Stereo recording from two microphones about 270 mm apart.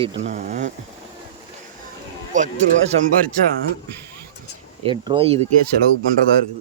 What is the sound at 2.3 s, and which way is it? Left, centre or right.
Speech, right.